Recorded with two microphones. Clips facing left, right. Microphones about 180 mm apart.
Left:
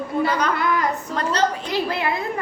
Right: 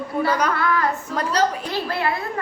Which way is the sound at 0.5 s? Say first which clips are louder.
Even; 15° left (ahead or behind).